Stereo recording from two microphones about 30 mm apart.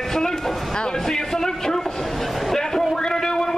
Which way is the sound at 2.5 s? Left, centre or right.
Centre.